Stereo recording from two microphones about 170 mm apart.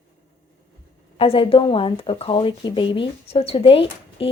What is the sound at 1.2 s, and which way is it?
Speech, 35° left (ahead or behind).